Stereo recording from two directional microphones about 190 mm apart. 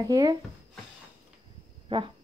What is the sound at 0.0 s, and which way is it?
Speech, 20° right (ahead or behind).